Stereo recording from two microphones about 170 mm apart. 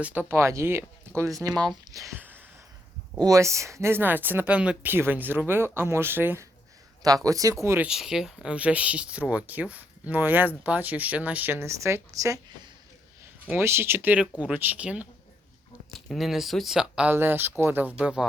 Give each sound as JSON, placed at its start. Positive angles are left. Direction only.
{"t": 0.0, "sound": "speech", "side_deg": -10}
{"t": 3.2, "sound": "speech", "side_deg": -20}
{"t": 7.9, "sound": "speech", "side_deg": -5}
{"t": 13.4, "sound": "speech", "side_deg": -10}